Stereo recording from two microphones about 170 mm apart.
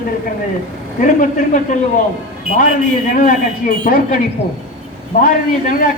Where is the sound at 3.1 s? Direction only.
55° left (ahead or behind).